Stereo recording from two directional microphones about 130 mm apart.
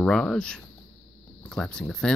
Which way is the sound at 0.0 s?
5° left (ahead or behind).